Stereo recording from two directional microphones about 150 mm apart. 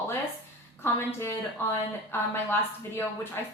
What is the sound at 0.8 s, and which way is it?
A woman's voice, 15° left (ahead or behind).